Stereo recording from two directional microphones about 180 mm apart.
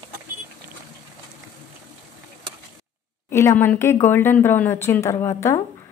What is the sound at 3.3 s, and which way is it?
Speech, 15° left (ahead or behind).